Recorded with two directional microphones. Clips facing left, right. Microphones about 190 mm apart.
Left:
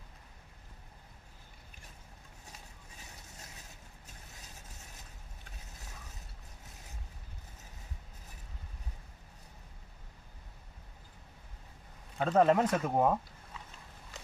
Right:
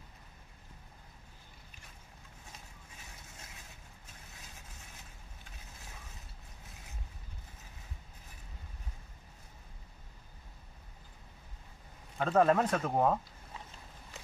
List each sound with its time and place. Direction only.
12.2 s speech: 15° left (ahead or behind)